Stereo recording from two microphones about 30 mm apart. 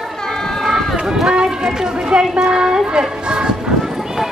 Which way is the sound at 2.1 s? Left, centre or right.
Right.